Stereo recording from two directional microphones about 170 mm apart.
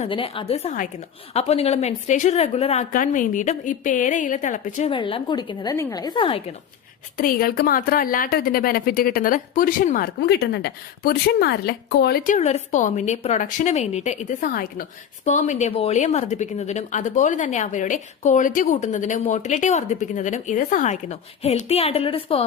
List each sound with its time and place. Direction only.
0.1 s a woman's voice: 30° left (ahead or behind)
0.7 s a woman's voice: 50° left (ahead or behind)
1.3 s a woman's voice: 35° left (ahead or behind)
2.9 s a woman's voice: 50° left (ahead or behind)
4.9 s a woman's voice: 30° left (ahead or behind)
7.2 s a woman's voice: 60° left (ahead or behind); by 12.2 s 75° left (ahead or behind)
12.2 s a woman's voice: 45° left (ahead or behind)